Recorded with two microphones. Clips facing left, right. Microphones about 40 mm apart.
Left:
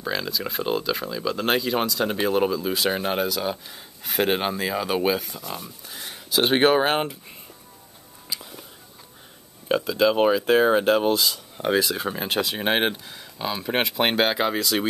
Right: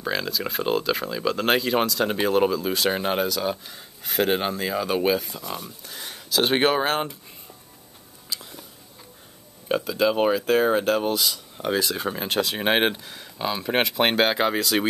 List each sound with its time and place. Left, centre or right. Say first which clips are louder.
0.0 s speech: right 1 dB; centre
9.7 s speech: left 2 dB; centre
10.4 s speech: left 2 dB; centre
11.1 s speech: left 1 dB; centre